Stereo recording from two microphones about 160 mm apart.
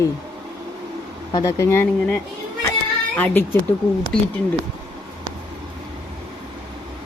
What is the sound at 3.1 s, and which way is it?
Speech, 10° left (ahead or behind).